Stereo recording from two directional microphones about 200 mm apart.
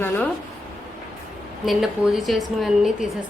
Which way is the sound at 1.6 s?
Centre (ahead or behind).